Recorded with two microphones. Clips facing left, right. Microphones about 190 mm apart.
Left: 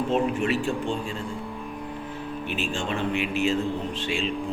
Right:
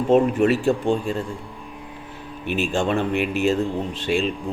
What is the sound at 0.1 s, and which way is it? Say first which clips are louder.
A man's voice: right 10 dB; 45° right (ahead or behind).